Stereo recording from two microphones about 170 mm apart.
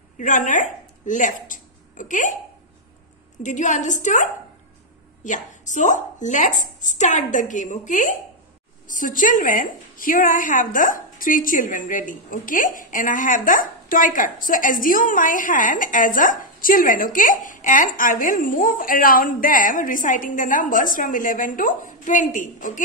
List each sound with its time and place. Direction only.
0.2 s speech: 50° left (ahead or behind)
3.4 s a woman's voice: 45° left (ahead or behind)
5.2 s a woman's voice: 45° left (ahead or behind)